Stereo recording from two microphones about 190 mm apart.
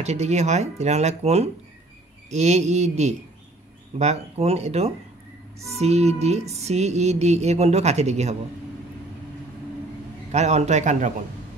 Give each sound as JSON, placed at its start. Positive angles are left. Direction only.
{"t": 0.0, "sound": "music", "side_deg": -35}
{"t": 10.3, "sound": "music", "side_deg": -35}